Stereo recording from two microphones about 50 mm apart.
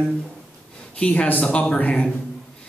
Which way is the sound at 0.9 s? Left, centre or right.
Left.